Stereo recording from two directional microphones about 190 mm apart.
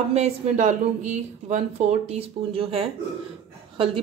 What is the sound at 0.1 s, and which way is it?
A woman's voice, 35° right (ahead or behind).